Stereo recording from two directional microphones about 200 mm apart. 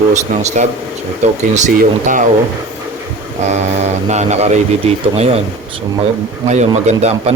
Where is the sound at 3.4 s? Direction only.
35° right (ahead or behind).